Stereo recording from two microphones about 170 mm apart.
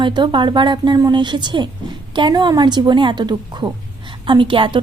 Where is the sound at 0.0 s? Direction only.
25° right (ahead or behind).